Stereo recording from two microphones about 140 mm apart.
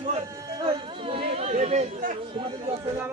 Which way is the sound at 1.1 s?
45° right (ahead or behind).